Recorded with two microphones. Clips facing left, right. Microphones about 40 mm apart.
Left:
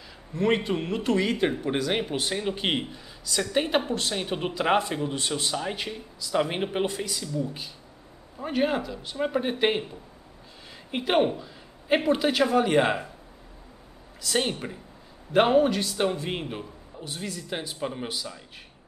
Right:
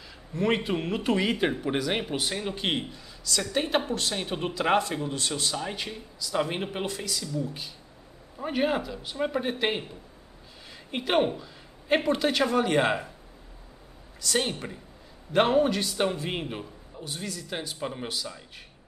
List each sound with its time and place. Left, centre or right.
0.3 s speech: centre
8.4 s a man's voice: centre
10.9 s a man's voice: centre
14.2 s a man's voice: centre